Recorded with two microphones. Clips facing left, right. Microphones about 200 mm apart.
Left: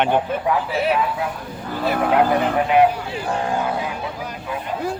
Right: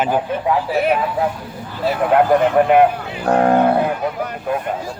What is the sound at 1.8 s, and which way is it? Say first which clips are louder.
Speech: right 2 dB; 50° left (ahead or behind).